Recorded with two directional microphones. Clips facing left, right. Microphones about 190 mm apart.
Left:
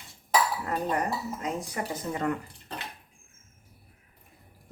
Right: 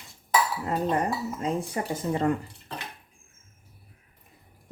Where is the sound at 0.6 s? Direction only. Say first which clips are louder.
Right 3 dB; 25° right (ahead or behind).